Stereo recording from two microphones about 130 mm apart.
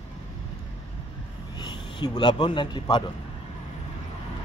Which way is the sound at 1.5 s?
35° left (ahead or behind).